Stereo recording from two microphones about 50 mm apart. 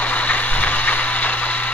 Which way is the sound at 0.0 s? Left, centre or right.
Left.